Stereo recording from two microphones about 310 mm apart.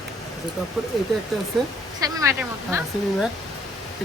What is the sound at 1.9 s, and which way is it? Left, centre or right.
Speech, centre.